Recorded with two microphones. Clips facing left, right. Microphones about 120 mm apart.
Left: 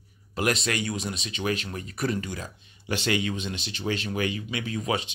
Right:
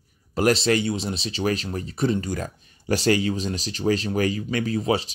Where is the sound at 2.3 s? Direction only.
40° right (ahead or behind).